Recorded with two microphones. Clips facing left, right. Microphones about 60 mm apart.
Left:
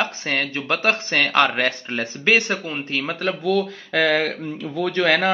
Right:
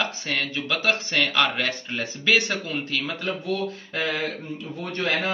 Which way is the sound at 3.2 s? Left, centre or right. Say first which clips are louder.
Left 10 dB; left.